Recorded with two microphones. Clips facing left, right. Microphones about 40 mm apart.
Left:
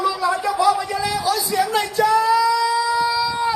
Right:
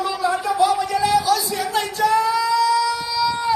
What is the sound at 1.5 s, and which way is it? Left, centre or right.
Speech, left.